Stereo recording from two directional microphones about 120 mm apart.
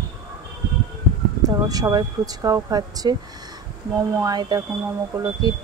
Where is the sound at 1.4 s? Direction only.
30° right (ahead or behind).